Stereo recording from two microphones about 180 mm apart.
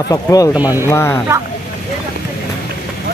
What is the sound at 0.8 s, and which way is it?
Speech, 15° left (ahead or behind).